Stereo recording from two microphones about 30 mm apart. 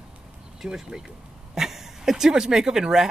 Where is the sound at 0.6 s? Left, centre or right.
Right.